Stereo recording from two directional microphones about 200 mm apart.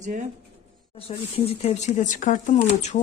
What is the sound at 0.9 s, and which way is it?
Speech, 30° left (ahead or behind).